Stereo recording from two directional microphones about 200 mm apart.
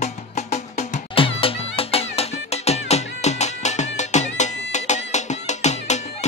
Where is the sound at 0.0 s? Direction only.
35° left (ahead or behind).